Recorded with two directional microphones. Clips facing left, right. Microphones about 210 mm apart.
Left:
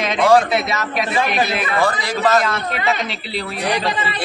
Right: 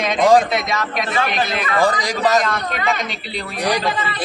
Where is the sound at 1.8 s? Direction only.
15° right (ahead or behind).